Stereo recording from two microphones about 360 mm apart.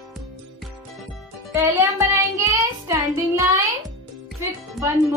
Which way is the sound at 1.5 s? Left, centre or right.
Centre.